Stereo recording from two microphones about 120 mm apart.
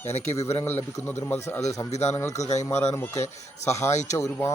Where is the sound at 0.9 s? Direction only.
25° left (ahead or behind).